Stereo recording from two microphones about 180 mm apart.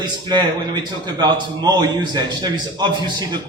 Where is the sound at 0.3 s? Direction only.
25° right (ahead or behind).